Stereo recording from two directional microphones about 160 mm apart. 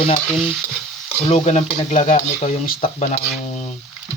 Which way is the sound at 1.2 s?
40° left (ahead or behind).